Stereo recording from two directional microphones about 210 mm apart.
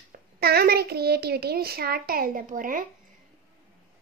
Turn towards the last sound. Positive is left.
turn(degrees=-40)  # may be behind; listen again after turning